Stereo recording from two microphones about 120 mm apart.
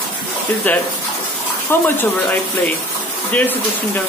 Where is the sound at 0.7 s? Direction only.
15° left (ahead or behind).